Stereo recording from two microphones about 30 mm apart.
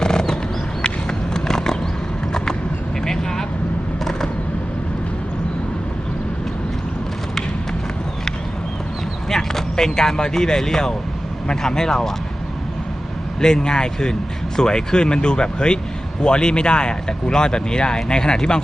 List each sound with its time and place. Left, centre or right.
0.0 s a sound: left
2.3 s vehicle: left
9.3 s speech: centre
13.4 s speech: left